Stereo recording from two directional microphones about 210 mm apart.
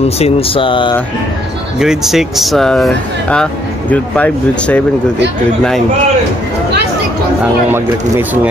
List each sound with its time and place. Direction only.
0.0 s speech: 30° left (ahead or behind)
1.8 s speech: centre (ahead or behind)